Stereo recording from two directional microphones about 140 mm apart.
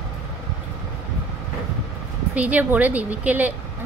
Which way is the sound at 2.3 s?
10° right (ahead or behind).